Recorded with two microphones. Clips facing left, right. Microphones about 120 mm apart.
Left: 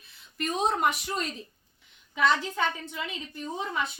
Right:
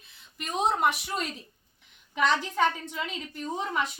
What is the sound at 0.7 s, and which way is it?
Speech, 5° right (ahead or behind).